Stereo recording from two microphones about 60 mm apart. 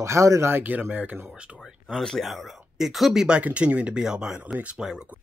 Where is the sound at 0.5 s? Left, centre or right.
Right.